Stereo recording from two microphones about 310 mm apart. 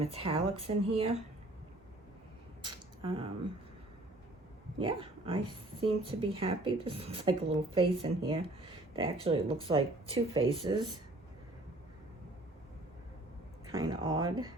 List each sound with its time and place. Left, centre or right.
0.0 s speech: centre
2.6 s a sound: centre
4.8 s speech: centre
13.7 s speech: centre